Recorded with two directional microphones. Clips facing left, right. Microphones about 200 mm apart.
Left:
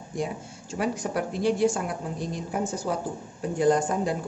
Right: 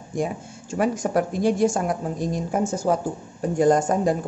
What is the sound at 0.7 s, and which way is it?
A woman's voice, 45° right (ahead or behind).